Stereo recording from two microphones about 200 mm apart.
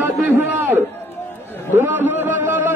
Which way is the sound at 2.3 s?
10° right (ahead or behind).